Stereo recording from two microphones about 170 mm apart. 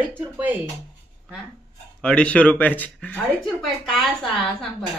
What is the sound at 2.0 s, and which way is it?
Speech, 5° left (ahead or behind).